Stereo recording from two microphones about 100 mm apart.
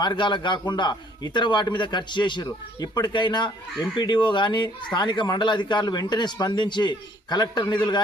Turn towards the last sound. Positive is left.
turn(degrees=45)  # may be behind; listen again after turning